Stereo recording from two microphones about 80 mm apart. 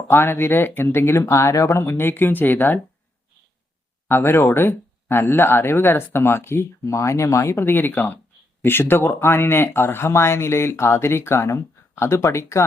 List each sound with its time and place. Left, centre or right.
0.1 s speech: left
4.1 s speech: left